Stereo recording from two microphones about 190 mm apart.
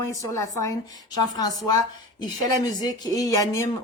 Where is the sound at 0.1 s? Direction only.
15° left (ahead or behind).